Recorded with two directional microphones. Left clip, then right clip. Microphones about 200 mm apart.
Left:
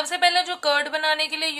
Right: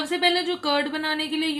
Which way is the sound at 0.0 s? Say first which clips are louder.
Left 2 dB; 55° left (ahead or behind).